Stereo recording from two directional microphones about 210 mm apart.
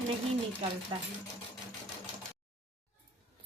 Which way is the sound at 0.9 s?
20° right (ahead or behind).